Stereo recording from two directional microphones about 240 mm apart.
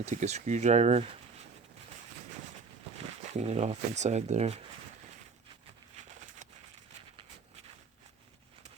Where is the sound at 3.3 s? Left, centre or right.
Right.